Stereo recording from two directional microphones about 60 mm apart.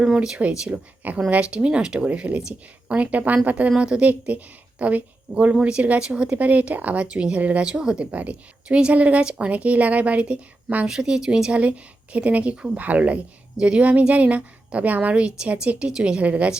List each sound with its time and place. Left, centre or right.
0.0 s a woman's voice: centre
3.8 s speech: centre
4.0 s a woman's voice: right
8.1 s a woman's voice: right